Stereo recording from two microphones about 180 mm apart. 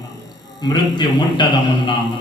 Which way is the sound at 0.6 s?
25° left (ahead or behind).